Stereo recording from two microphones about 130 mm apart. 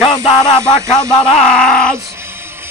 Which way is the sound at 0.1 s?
60° left (ahead or behind).